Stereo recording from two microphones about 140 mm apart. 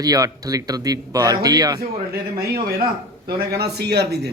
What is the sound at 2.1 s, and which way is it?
Speech, 90° right.